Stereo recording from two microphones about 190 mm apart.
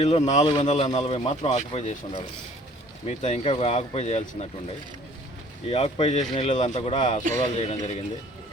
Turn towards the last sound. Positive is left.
turn(degrees=35)  # may be behind; listen again after turning